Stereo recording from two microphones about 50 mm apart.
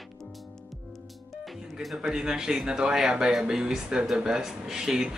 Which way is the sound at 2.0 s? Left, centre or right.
Centre.